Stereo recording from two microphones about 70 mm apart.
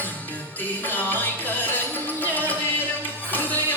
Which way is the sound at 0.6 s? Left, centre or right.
Left.